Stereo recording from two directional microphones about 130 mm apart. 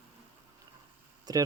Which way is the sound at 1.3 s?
30° right (ahead or behind).